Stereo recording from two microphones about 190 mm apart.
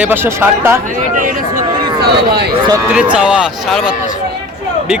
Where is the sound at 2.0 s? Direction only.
55° right (ahead or behind).